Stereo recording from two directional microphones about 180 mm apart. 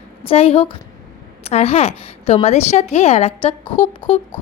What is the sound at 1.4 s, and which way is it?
A woman's voice, 35° left (ahead or behind).